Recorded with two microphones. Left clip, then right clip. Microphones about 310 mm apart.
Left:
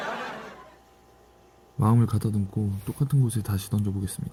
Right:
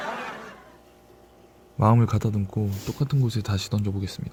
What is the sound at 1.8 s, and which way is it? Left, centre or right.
Speech, centre.